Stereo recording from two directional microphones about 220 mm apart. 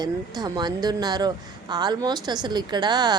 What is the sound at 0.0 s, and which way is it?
A woman's voice, 20° right (ahead or behind).